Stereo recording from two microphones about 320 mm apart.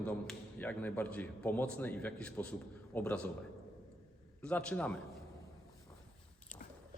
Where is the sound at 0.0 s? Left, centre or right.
Centre.